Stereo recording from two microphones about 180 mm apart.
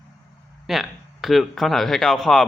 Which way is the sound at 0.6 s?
Centre (ahead or behind).